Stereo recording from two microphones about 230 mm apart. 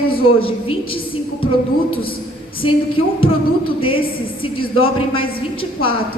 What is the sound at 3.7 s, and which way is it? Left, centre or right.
A woman's voice, left.